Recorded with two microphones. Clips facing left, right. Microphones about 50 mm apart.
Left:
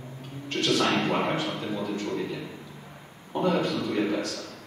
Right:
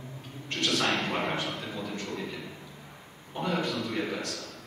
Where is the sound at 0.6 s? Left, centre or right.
Centre.